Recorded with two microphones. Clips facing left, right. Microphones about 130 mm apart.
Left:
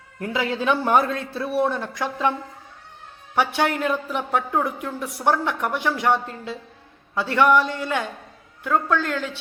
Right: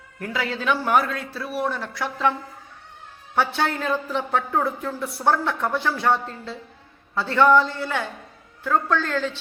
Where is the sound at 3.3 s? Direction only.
15° left (ahead or behind).